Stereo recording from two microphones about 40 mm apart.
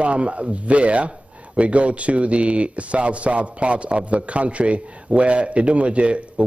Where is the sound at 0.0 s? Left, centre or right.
Right.